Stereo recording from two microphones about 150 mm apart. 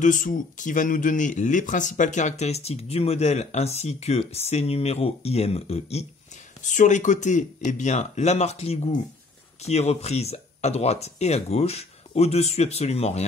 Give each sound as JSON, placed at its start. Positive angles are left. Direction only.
{"t": 0.0, "sound": "speech", "side_deg": 60}
{"t": 6.6, "sound": "speech", "side_deg": 55}